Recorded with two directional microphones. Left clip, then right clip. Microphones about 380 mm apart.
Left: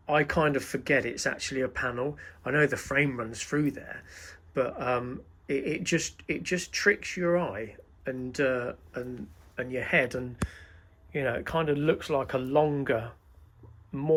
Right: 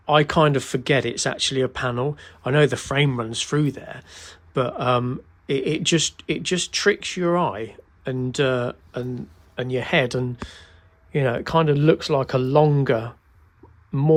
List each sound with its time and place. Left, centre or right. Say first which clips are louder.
0.0 s speech: right 8 dB; centre